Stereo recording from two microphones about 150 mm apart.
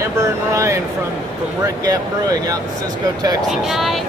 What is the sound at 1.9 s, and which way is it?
Speech, 25° right (ahead or behind).